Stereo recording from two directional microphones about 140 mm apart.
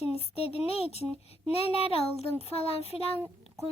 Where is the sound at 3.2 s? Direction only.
15° right (ahead or behind).